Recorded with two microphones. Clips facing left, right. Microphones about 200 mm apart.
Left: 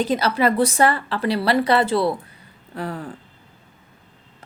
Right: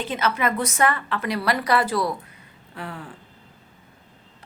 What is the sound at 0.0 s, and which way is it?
A woman's voice, 35° left (ahead or behind).